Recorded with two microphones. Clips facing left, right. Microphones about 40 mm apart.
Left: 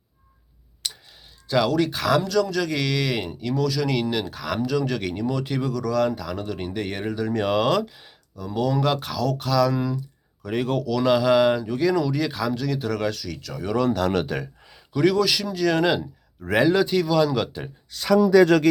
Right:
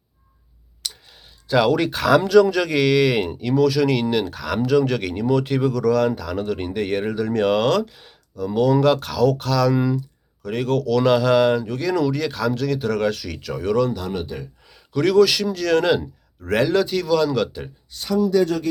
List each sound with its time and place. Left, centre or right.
0.8 s a sound: left
1.5 s speech: centre
2.2 s a man's voice: centre
6.5 s a man's voice: centre
7.3 s speech: centre
9.7 s a man's voice: centre
10.4 s speech: centre
13.9 s speech: left
14.7 s a man's voice: centre